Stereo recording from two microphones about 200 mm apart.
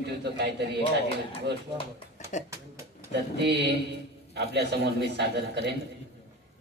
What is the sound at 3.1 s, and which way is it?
A man's voice, 60° right (ahead or behind).